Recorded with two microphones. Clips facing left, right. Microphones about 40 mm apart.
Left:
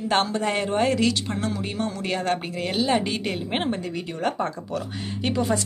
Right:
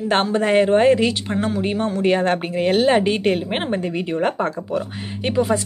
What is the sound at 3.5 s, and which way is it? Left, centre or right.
Speech, centre.